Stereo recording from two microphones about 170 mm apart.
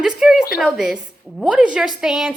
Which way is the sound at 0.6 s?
5° right (ahead or behind).